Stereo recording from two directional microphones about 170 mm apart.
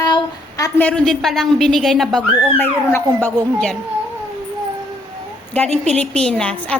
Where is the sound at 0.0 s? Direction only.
20° left (ahead or behind).